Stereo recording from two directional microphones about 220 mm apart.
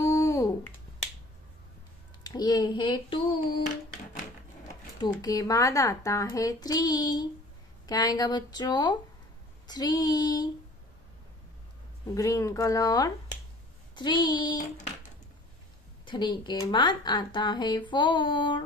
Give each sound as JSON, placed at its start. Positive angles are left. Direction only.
{"t": 0.0, "sound": "a sound", "side_deg": 15}
{"t": 2.2, "sound": "speech", "side_deg": 20}
{"t": 3.6, "sound": "a sound", "side_deg": 35}
{"t": 5.2, "sound": "a child's voice", "side_deg": 15}
{"t": 12.1, "sound": "a child's voice", "side_deg": 15}
{"t": 16.1, "sound": "speech", "side_deg": 20}